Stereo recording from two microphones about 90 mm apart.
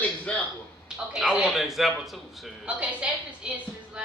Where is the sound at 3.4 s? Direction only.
10° right (ahead or behind).